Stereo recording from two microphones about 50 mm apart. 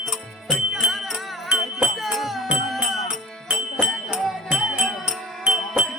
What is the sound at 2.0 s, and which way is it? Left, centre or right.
Music, centre.